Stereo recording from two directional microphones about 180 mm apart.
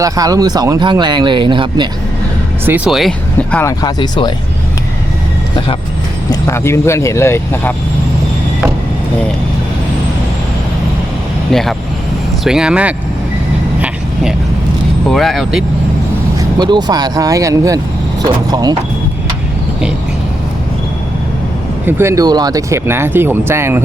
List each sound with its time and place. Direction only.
0.0 s speech: 20° right (ahead or behind)
2.6 s speech: 5° right (ahead or behind); by 4.3 s 25° left (ahead or behind)
6.5 s speech: 15° left (ahead or behind)
12.5 s speech: 5° right (ahead or behind)
15.1 s speech: centre (ahead or behind)
16.6 s speech: 25° right (ahead or behind)
21.8 s speech: 15° right (ahead or behind)